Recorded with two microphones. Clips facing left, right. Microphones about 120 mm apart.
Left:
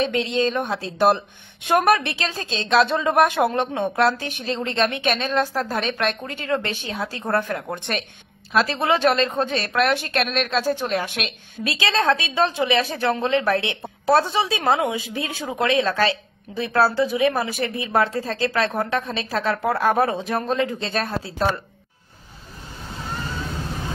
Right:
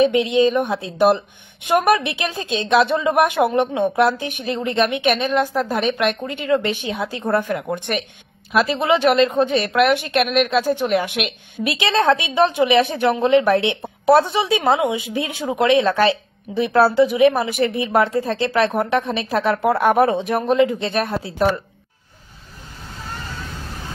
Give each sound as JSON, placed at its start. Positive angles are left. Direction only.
{"t": 0.0, "sound": "a woman's voice", "side_deg": -10}